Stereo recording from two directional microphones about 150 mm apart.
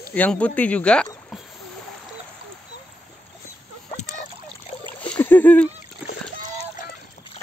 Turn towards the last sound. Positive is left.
turn(degrees=10)  # may be behind; listen again after turning